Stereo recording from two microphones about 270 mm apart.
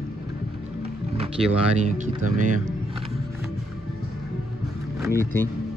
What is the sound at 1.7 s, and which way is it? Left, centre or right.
Speech, right.